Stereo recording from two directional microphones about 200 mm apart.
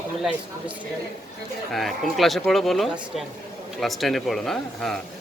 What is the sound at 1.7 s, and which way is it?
Speech, centre (ahead or behind).